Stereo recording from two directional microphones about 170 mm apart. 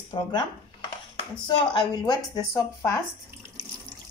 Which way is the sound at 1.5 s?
25° left (ahead or behind).